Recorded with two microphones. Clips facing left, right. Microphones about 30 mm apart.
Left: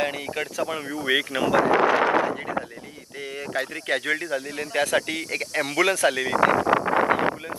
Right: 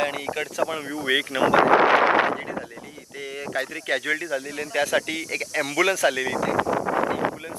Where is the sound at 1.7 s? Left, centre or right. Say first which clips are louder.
Right 2 dB; right.